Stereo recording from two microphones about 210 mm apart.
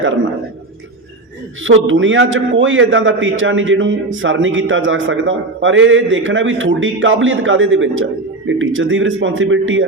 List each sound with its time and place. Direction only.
1.6 s a man's voice: 65° right (ahead or behind)